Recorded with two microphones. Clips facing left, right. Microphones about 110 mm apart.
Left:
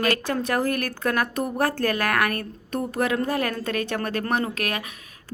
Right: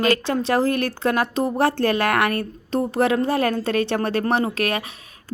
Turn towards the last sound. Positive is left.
turn(degrees=-30)  # may be behind; listen again after turning